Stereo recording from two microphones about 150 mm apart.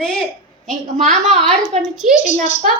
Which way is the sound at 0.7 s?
55° right (ahead or behind).